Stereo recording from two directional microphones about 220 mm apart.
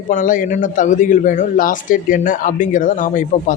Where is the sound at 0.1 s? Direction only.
35° left (ahead or behind).